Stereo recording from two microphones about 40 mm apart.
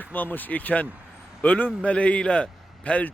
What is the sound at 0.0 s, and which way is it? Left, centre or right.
A man's voice, left.